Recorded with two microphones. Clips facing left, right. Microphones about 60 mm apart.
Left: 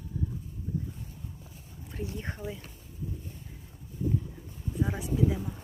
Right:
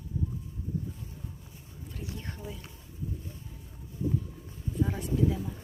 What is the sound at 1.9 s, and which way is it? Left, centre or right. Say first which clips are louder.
Speech: left 4 dB; left.